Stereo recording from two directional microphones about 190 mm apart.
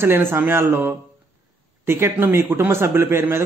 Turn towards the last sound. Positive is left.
turn(degrees=-15)  # may be behind; listen again after turning